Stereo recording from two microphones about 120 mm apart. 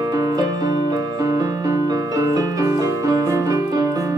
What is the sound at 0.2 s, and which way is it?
Music, 30° right (ahead or behind).